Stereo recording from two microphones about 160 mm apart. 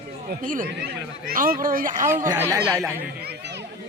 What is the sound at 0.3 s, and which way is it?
Speech, 60° right (ahead or behind).